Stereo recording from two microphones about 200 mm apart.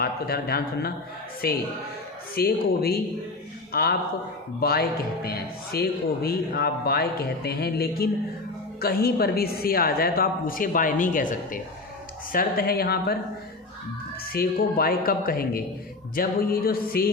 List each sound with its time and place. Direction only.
0.0 s a man's voice: 50° left (ahead or behind)
14.3 s a man's voice: 50° left (ahead or behind)